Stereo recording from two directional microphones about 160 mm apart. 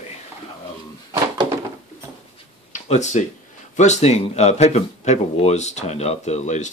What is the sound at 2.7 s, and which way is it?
Speech, 45° left (ahead or behind).